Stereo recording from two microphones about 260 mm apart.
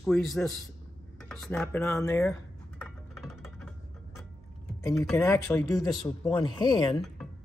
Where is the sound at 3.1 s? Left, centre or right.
Centre.